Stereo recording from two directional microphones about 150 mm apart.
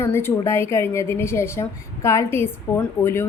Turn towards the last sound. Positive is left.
turn(degrees=15)  # may be behind; listen again after turning